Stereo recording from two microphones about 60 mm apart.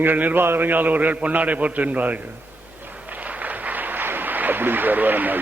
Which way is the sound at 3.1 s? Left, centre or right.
Right.